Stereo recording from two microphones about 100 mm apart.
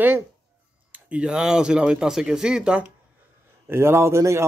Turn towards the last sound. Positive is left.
turn(degrees=-30)  # may be behind; listen again after turning